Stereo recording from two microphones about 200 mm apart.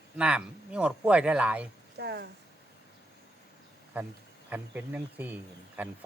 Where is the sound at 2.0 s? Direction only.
55° right (ahead or behind).